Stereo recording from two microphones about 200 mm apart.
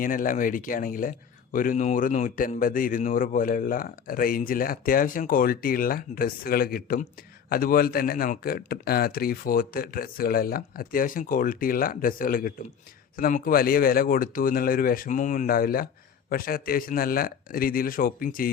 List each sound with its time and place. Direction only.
0.0 s a man's voice: 45° left (ahead or behind)